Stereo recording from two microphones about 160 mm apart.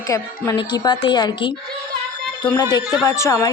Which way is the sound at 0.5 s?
30° left (ahead or behind).